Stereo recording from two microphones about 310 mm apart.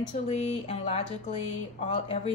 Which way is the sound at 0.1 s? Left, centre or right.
Left.